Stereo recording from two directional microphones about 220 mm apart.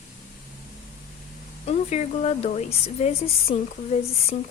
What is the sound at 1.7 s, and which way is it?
Speech, 30° left (ahead or behind).